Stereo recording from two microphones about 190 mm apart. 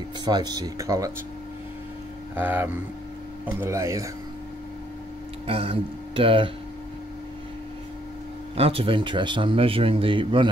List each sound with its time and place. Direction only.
0.2 s speech: 20° right (ahead or behind)
2.3 s speech: 10° right (ahead or behind)
5.5 s speech: 30° right (ahead or behind)
8.5 s speech: 30° right (ahead or behind)